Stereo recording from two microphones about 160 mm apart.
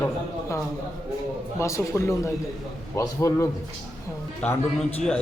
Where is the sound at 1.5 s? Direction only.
20° left (ahead or behind).